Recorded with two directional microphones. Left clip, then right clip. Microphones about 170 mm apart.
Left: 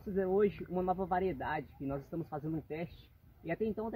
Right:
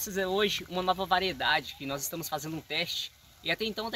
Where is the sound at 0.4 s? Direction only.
20° right (ahead or behind).